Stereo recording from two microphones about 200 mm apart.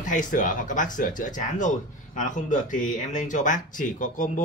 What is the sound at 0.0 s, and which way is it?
Speech, 40° left (ahead or behind).